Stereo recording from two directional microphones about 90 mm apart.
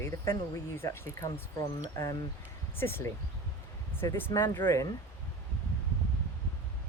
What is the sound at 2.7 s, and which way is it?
Speech, 25° left (ahead or behind).